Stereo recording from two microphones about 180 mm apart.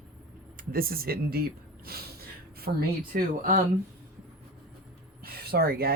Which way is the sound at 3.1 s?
50° right (ahead or behind).